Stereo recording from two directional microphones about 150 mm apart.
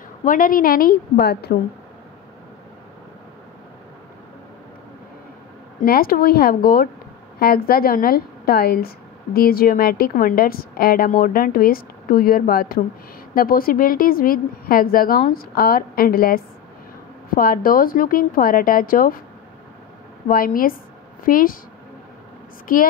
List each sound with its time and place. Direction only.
0.2 s a woman's voice: 65° left (ahead or behind); by 1.5 s 90° left
5.8 s a woman's voice: 75° left (ahead or behind)
13.3 s a woman's voice: 70° left (ahead or behind)
17.4 s a woman's voice: 70° left (ahead or behind)
20.2 s a woman's voice: 70° left (ahead or behind)